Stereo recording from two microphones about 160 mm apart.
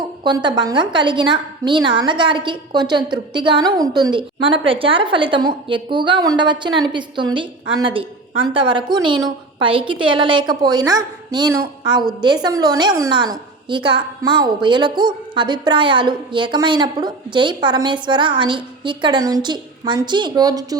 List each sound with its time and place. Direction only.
0.3 s a woman's voice: 30° right (ahead or behind)